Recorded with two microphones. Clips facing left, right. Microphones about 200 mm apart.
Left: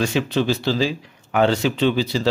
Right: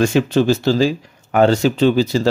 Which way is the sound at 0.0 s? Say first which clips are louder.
Right 6 dB; 45° right (ahead or behind).